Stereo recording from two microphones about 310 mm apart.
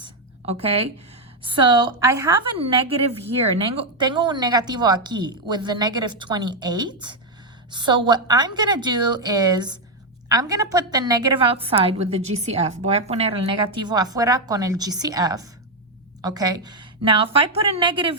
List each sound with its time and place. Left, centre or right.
0.4 s a woman's voice: centre